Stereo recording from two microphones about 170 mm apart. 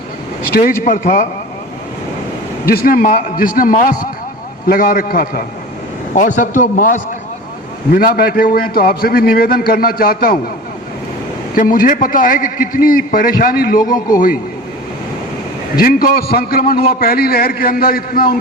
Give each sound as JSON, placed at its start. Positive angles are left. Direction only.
{"t": 0.5, "sound": "a man's voice", "side_deg": 55}
{"t": 2.6, "sound": "a man's voice", "side_deg": 55}
{"t": 6.1, "sound": "a man's voice", "side_deg": 50}
{"t": 11.5, "sound": "a man's voice", "side_deg": 55}
{"t": 15.8, "sound": "a man's voice", "side_deg": 55}